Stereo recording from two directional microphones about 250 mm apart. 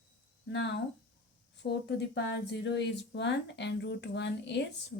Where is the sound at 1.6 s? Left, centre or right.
Left.